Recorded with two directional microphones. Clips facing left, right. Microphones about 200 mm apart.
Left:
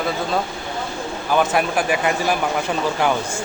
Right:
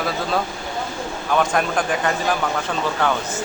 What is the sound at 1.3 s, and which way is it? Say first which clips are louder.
Speech: left 1 dB; 5° left (ahead or behind).